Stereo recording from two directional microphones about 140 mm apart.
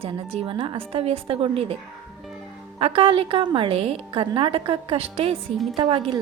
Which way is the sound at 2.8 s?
40° right (ahead or behind).